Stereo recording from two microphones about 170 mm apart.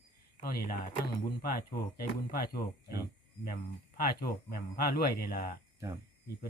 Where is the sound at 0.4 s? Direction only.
60° left (ahead or behind).